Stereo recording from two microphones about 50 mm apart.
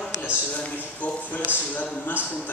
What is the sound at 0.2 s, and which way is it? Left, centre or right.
Speech, left.